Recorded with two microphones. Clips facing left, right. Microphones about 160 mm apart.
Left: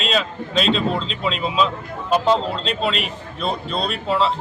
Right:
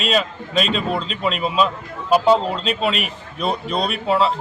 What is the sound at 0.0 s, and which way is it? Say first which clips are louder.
Speech: right 2 dB; 5° right (ahead or behind).